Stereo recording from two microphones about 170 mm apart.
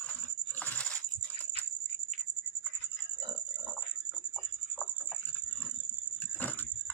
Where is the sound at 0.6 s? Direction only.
10° left (ahead or behind).